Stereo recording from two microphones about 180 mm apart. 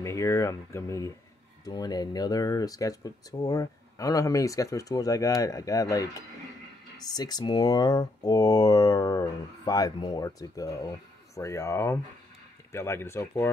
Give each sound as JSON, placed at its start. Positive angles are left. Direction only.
{"t": 0.0, "sound": "speech", "side_deg": 15}